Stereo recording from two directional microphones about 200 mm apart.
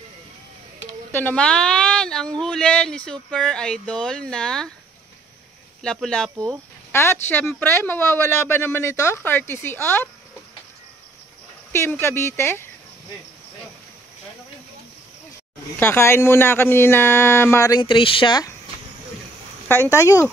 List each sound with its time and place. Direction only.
1.1 s speech: 5° left (ahead or behind)
5.8 s speech: 5° left (ahead or behind)
11.7 s speech: 10° left (ahead or behind)
15.8 s speech: 10° left (ahead or behind)
19.7 s speech: 10° left (ahead or behind)